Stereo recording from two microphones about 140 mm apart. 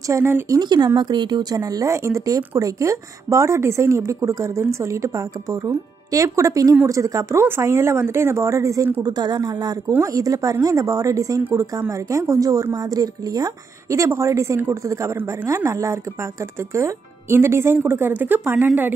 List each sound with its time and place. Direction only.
0.1 s speech: 15° right (ahead or behind)
0.6 s speech: 30° right (ahead or behind)